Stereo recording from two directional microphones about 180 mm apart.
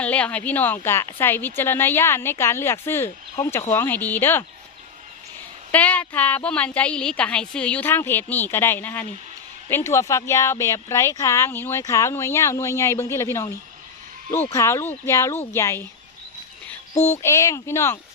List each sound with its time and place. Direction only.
0.0 s speech: 5° left (ahead or behind)
5.7 s speech: 10° left (ahead or behind)